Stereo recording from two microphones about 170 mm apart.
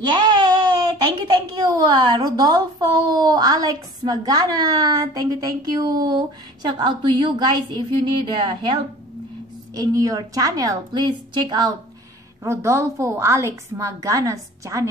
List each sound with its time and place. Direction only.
0.0 s a sound: 25° right (ahead or behind)
1.0 s a woman's voice: 25° right (ahead or behind)
9.8 s a woman's voice: 20° right (ahead or behind)